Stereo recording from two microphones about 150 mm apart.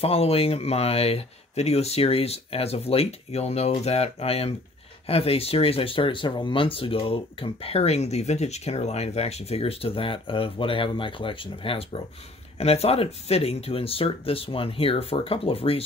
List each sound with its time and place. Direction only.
0.0 s speech: 40° left (ahead or behind)